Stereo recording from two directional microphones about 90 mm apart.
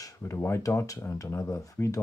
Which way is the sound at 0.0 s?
30° left (ahead or behind).